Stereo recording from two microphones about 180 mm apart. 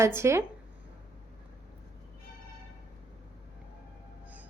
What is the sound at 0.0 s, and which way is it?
Speech, 15° right (ahead or behind).